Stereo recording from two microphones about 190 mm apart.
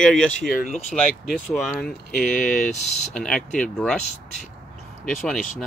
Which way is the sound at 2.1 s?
40° left (ahead or behind).